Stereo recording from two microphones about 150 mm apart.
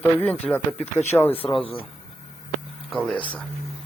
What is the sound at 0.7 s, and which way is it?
Speech, 45° left (ahead or behind).